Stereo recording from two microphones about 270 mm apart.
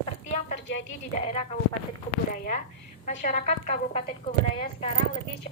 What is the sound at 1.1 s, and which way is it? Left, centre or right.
A woman's voice, left.